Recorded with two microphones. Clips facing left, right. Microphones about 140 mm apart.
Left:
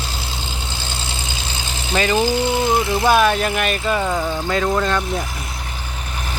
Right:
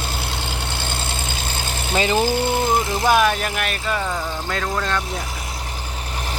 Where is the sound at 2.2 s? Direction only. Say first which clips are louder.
Left 1 dB; 50° right (ahead or behind).